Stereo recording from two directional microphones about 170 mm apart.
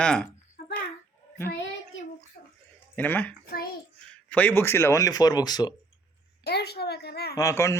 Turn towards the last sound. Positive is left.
turn(degrees=15)  # may be behind; listen again after turning